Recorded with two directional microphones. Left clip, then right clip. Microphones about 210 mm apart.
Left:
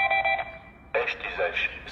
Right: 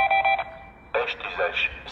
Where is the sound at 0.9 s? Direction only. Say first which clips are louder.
Right 1 dB; centre (ahead or behind).